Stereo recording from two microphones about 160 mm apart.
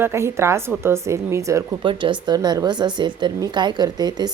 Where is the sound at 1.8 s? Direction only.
30° right (ahead or behind).